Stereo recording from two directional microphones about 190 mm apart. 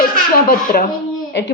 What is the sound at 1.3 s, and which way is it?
Speech, 70° left (ahead or behind).